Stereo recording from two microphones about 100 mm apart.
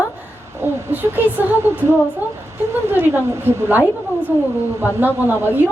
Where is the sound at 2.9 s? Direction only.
20° right (ahead or behind).